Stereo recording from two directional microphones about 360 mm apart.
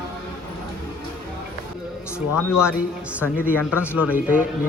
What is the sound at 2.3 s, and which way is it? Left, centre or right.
Speech, left.